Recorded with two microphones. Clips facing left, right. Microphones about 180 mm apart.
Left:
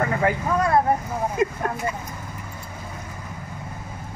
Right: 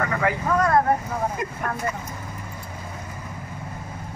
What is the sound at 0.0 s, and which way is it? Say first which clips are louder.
Speech: left 2 dB; 25° left (ahead or behind).